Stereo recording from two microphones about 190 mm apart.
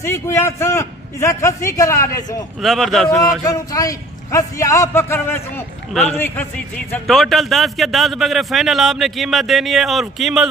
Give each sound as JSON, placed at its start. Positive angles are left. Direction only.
{"t": 0.0, "sound": "a man's voice", "side_deg": 15}
{"t": 2.6, "sound": "a man's voice", "side_deg": 0}
{"t": 3.4, "sound": "a man's voice", "side_deg": 20}